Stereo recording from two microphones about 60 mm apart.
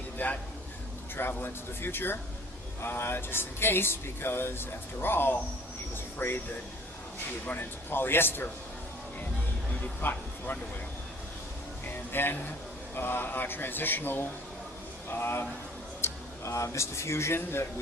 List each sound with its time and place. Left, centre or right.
0.2 s a man's voice: left
7.4 s speech: left
9.8 s speech: left
11.9 s speech: left
16.0 s a man's voice: left